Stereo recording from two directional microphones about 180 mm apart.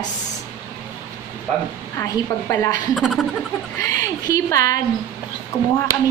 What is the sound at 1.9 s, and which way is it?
Speech, 20° left (ahead or behind).